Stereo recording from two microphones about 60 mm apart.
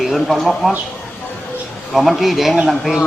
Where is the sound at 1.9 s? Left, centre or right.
Centre.